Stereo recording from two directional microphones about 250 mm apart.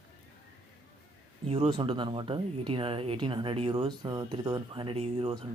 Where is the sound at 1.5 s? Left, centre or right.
Right.